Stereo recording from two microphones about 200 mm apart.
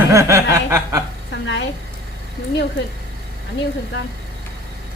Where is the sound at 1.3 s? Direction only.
65° left (ahead or behind).